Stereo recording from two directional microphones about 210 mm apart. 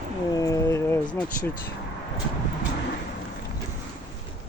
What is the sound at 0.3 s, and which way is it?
Vehicle, 15° left (ahead or behind).